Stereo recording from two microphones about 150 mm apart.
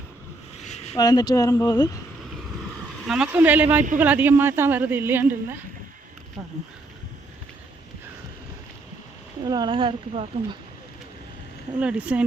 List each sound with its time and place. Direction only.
0.6 s a sound: 50° left (ahead or behind)
0.9 s speech: 25° left (ahead or behind)
3.1 s a woman's voice: 10° right (ahead or behind)
9.4 s speech: 30° right (ahead or behind)
11.8 s a woman's voice: 10° right (ahead or behind)